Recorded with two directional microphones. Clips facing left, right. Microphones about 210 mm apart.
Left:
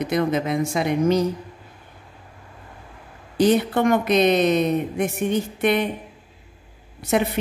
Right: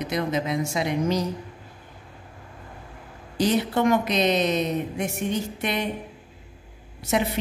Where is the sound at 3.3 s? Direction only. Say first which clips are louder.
Left 4 dB; 55° left (ahead or behind).